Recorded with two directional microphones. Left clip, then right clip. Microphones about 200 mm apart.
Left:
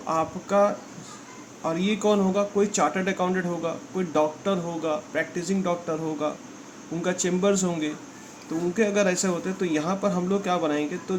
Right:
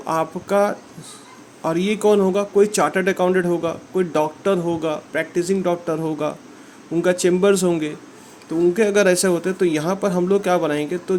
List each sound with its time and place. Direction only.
0.1 s speech: 35° right (ahead or behind)